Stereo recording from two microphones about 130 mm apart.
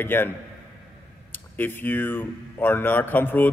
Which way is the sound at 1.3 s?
15° left (ahead or behind).